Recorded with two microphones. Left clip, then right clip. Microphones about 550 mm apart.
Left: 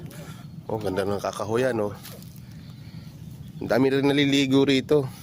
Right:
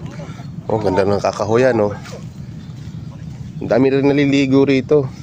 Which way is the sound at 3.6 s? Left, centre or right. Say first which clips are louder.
Right 7 dB; left.